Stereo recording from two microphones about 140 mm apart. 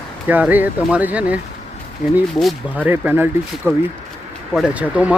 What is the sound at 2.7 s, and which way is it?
Speech, 10° right (ahead or behind).